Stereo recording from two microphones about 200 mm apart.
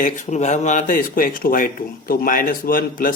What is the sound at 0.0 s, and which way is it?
Speech, 40° left (ahead or behind).